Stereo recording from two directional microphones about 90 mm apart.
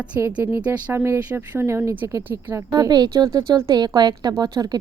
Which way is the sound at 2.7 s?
50° right (ahead or behind).